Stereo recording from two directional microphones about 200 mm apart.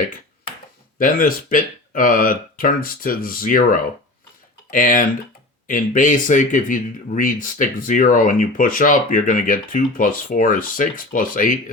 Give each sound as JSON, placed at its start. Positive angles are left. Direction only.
{"t": 0.9, "sound": "speech", "side_deg": 45}